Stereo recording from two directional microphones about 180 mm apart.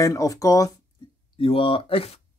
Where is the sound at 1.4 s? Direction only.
30° left (ahead or behind).